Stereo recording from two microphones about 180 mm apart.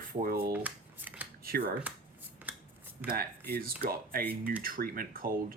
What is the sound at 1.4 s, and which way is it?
Speech, 55° right (ahead or behind).